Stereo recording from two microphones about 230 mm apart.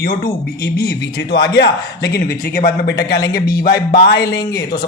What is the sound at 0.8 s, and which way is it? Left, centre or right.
A man's voice, left.